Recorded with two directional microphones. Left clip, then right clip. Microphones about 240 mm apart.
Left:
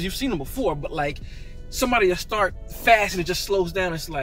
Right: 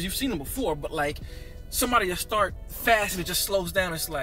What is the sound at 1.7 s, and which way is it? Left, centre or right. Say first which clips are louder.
Speech: left 4 dB; centre.